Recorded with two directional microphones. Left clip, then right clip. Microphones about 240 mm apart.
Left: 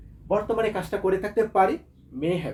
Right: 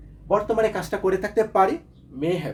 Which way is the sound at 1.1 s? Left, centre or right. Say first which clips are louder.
Right 2 dB; right.